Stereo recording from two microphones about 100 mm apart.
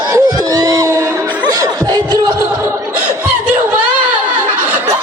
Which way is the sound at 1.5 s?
40° right (ahead or behind).